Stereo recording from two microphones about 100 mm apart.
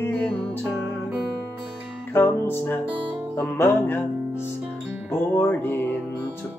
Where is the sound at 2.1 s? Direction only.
20° left (ahead or behind).